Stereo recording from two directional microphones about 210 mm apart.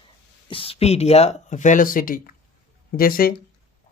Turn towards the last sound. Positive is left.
turn(degrees=45)  # may be behind; listen again after turning